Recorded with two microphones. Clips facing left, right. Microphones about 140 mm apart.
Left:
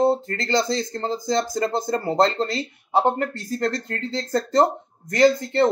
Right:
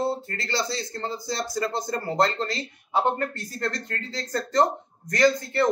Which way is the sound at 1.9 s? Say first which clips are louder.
Left 4 dB; 25° left (ahead or behind).